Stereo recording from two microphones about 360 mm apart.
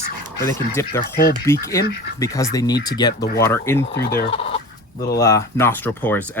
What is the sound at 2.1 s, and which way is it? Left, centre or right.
Speech, centre.